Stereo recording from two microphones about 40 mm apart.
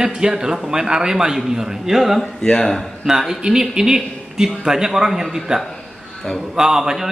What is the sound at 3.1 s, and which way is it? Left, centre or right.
A man's voice, centre.